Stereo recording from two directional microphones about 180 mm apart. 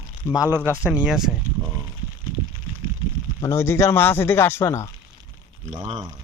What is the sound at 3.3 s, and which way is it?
Speech, 15° left (ahead or behind).